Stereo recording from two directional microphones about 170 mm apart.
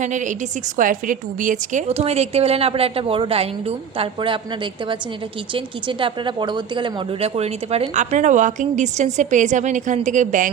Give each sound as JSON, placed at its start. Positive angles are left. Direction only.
{"t": 0.0, "sound": "speech", "side_deg": -45}
{"t": 1.9, "sound": "a woman's voice", "side_deg": -35}